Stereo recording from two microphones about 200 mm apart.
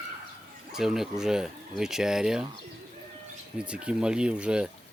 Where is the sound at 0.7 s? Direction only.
Centre (ahead or behind).